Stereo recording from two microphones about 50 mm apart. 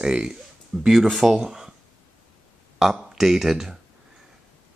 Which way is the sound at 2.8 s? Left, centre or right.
Centre.